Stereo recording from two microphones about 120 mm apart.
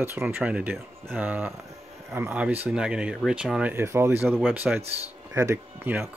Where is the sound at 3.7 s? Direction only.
20° right (ahead or behind).